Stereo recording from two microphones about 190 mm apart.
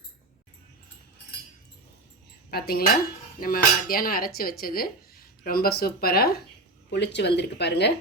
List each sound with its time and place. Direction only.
2.5 s speech: 55° left (ahead or behind)